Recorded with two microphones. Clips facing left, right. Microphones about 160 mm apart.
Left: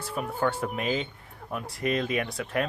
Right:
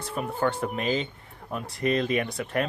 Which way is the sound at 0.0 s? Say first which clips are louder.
Right 1 dB; centre (ahead or behind).